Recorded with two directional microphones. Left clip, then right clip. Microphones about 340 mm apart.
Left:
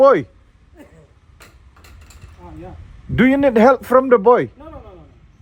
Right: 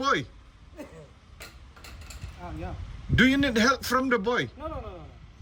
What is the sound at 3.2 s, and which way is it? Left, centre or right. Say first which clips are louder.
A man's voice: left 9 dB; centre.